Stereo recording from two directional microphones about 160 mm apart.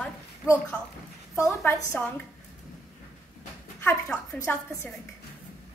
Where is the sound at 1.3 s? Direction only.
20° left (ahead or behind).